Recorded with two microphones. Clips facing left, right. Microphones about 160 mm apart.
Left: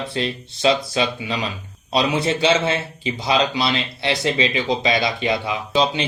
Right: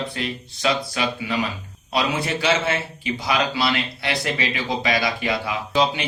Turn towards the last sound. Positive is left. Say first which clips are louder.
# left 1 dB
turn(degrees=25)  # may be behind; listen again after turning